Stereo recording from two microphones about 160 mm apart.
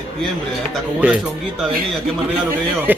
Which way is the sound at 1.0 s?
5° right (ahead or behind).